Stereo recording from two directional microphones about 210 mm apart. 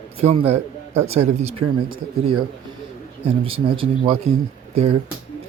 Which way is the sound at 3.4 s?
25° right (ahead or behind).